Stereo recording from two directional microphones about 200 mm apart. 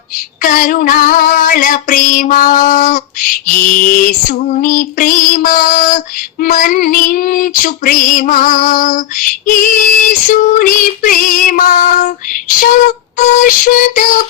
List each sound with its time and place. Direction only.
0.4 s female singing: 45° left (ahead or behind)
13.1 s synthetic singing: 40° left (ahead or behind)